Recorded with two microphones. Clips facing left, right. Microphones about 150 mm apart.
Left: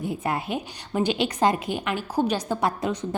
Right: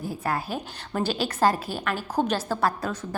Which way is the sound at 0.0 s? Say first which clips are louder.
Left 1 dB; 20° left (ahead or behind).